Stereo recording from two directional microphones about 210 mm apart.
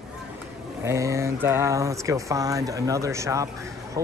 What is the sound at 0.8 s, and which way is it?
Speech, 15° right (ahead or behind).